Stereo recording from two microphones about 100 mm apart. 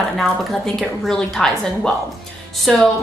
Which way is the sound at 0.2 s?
Centre (ahead or behind).